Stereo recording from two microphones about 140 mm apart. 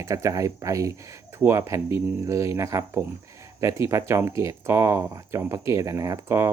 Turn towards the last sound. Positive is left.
turn(degrees=-20)  # may be behind; listen again after turning